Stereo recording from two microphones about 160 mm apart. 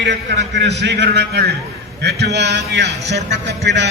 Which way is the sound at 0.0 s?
90° right.